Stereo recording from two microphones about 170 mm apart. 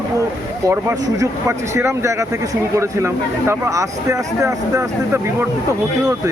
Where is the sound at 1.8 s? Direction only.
15° right (ahead or behind).